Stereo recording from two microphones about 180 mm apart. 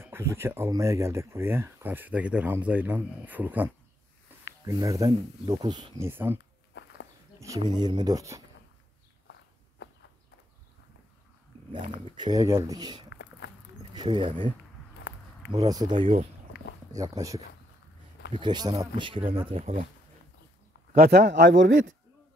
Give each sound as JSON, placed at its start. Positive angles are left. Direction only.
{"t": 0.0, "sound": "speech", "side_deg": -15}
{"t": 5.9, "sound": "speech", "side_deg": -15}
{"t": 6.7, "sound": "a sound", "side_deg": 75}
{"t": 7.3, "sound": "speech", "side_deg": -20}
{"t": 11.9, "sound": "speech", "side_deg": -25}
{"t": 13.1, "sound": "a sound", "side_deg": 75}
{"t": 13.9, "sound": "speech", "side_deg": -25}
{"t": 15.1, "sound": "a sound", "side_deg": 70}
{"t": 15.5, "sound": "speech", "side_deg": -20}
{"t": 20.9, "sound": "a man's voice", "side_deg": -60}